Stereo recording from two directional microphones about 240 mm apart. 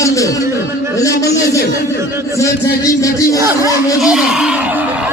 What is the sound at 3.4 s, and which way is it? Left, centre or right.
Speech, centre.